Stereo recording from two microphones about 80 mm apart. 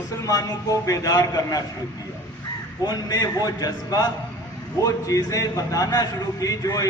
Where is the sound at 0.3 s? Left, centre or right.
Left.